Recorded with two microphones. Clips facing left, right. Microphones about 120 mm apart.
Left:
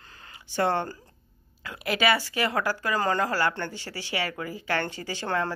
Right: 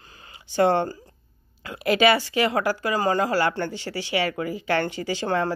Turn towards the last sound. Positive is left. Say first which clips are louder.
# right 5 dB
turn(degrees=-15)  # may be behind; listen again after turning